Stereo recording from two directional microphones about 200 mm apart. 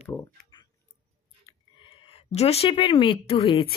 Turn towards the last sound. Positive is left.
turn(degrees=30)  # may be behind; listen again after turning